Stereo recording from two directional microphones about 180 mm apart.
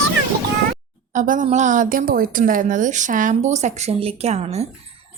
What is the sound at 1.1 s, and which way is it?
A woman's voice, 45° right (ahead or behind).